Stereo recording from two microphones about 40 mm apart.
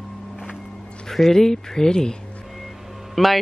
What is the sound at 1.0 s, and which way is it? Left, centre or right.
A woman's voice, centre.